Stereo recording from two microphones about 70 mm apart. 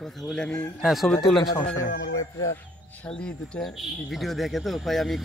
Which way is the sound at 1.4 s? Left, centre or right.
Left.